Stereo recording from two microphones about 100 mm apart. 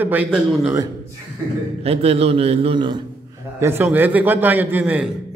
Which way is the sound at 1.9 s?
90° right.